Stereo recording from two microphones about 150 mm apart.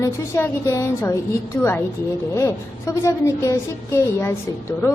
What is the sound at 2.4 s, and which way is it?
A woman's voice, 20° left (ahead or behind).